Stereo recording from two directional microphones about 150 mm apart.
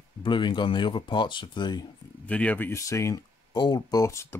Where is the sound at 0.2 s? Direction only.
30° left (ahead or behind).